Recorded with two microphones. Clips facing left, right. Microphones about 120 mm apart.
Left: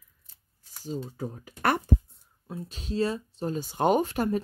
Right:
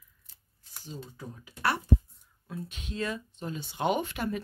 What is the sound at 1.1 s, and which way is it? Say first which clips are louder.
Speech: left 8 dB; 45° left (ahead or behind).